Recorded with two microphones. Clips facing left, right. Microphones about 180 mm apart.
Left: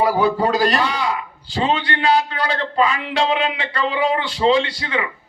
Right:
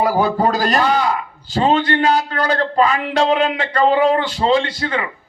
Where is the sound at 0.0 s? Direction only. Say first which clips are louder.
Right 1 dB; 45° right (ahead or behind).